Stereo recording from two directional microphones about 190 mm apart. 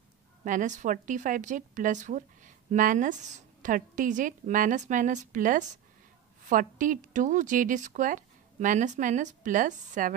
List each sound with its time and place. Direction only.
0.5 s a woman's voice: 40° right (ahead or behind)